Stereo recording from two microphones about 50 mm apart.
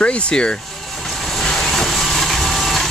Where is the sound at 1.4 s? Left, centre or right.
Centre.